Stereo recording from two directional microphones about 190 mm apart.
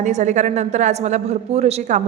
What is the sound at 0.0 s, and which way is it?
A woman's voice, 40° right (ahead or behind).